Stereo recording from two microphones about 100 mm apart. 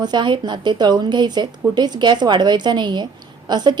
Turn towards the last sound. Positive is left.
turn(degrees=-45)  # may be behind; listen again after turning